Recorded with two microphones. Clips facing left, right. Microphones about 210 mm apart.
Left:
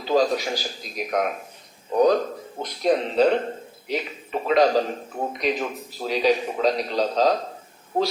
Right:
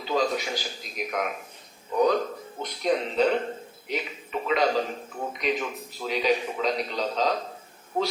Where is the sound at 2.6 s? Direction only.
35° left (ahead or behind).